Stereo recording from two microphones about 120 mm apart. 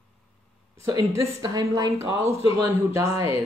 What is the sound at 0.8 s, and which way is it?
Speech, 30° right (ahead or behind).